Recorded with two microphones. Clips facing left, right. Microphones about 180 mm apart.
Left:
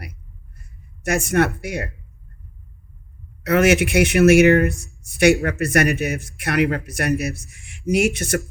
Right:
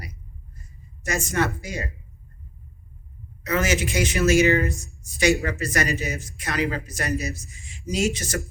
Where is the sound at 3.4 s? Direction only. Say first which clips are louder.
Left 8 dB; 65° left (ahead or behind).